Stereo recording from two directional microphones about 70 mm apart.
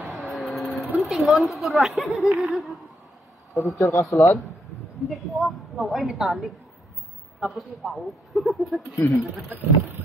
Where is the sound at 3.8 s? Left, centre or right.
Left.